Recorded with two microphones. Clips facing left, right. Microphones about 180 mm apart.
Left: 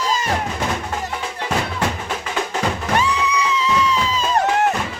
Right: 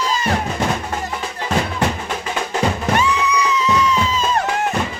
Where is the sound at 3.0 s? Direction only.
30° left (ahead or behind).